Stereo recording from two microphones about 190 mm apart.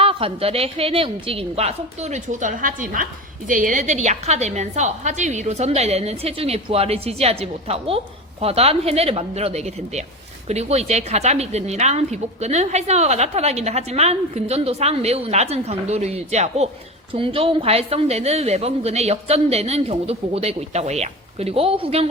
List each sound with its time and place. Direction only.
0.0 s a woman's voice: 30° right (ahead or behind)